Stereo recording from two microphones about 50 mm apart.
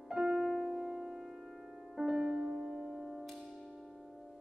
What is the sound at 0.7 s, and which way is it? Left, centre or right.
Music, centre.